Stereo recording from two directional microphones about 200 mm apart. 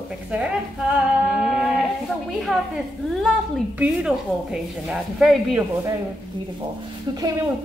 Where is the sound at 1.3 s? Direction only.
5° right (ahead or behind).